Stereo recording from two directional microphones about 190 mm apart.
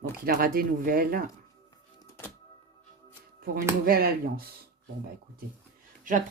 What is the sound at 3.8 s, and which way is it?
Speech, 50° right (ahead or behind).